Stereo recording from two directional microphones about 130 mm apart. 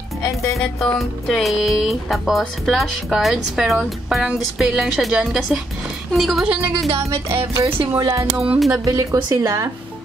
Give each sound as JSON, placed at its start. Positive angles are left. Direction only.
{"t": 0.6, "sound": "speech", "side_deg": 0}
{"t": 8.0, "sound": "speech", "side_deg": -30}